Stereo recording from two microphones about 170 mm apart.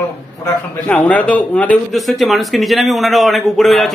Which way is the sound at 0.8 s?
10° left (ahead or behind).